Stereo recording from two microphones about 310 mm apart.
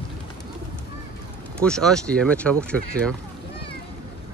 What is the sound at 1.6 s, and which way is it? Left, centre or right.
Speech, centre.